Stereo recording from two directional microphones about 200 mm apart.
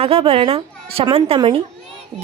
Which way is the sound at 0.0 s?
30° right (ahead or behind).